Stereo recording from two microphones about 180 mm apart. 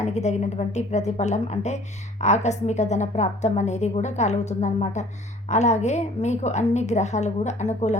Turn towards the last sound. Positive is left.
turn(degrees=40)  # may be behind; listen again after turning